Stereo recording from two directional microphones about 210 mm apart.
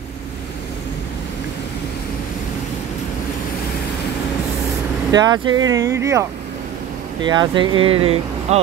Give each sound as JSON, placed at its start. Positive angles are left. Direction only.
{"t": 5.1, "sound": "speech", "side_deg": -20}
{"t": 7.2, "sound": "speech", "side_deg": -20}